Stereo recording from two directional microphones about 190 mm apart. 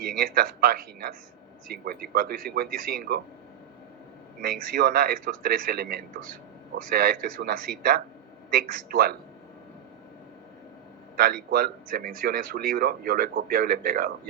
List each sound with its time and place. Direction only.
0.0 s a man's voice: 55° right (ahead or behind)
4.4 s a man's voice: 55° right (ahead or behind)
11.2 s a man's voice: 55° right (ahead or behind)